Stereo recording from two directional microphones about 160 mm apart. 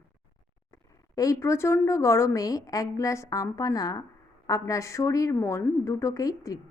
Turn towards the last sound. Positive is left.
turn(degrees=20)  # may be behind; listen again after turning